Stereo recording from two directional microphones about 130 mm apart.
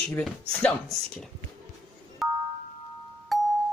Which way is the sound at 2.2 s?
Centre (ahead or behind).